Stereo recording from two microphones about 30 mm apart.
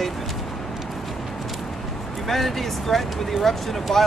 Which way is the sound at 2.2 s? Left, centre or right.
Centre.